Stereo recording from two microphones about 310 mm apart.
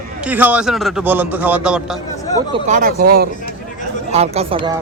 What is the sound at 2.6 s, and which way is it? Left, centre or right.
Speech, right.